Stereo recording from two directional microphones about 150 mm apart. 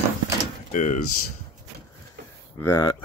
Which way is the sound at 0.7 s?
55° left (ahead or behind).